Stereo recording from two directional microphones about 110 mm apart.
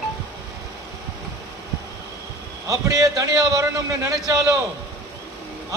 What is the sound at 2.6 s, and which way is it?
Speech, 30° right (ahead or behind).